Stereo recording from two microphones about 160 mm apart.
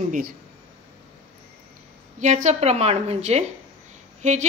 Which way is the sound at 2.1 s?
50° right (ahead or behind).